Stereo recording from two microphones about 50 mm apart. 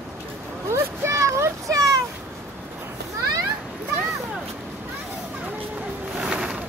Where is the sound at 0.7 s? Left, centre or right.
Right.